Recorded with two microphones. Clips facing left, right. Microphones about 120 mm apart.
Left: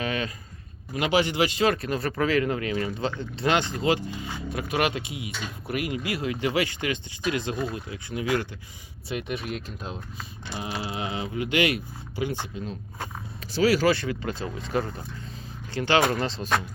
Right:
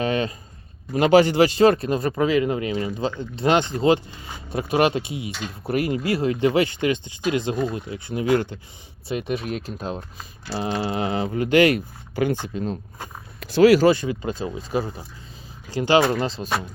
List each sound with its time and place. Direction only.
0.0 s a sound: 30° right (ahead or behind)
0.9 s speech: 40° right (ahead or behind); by 3.2 s 15° right (ahead or behind)
3.4 s speech: 25° right (ahead or behind)
9.8 s speech: 40° right (ahead or behind)
13.4 s speech: 55° right (ahead or behind)
13.8 s speech: 20° right (ahead or behind)